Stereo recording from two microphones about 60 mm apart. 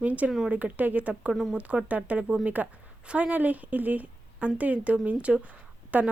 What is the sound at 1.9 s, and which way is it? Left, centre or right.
A woman's voice, right.